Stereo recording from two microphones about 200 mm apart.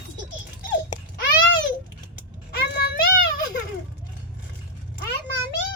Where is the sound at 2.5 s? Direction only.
55° left (ahead or behind).